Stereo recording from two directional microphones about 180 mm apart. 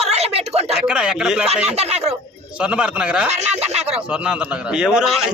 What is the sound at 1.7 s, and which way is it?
Speech, 35° right (ahead or behind).